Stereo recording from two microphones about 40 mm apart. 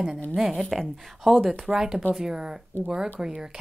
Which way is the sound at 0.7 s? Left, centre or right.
Centre.